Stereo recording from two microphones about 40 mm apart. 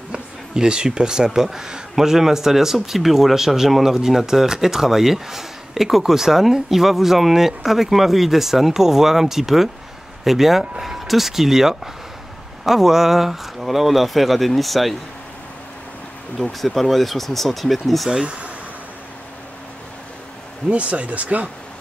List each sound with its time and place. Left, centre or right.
0.6 s speech: right; by 15.0 s centre
16.6 s speech: centre
18.2 s speech: right
20.7 s speech: right